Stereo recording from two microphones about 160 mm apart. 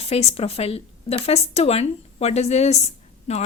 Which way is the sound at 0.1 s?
40° left (ahead or behind).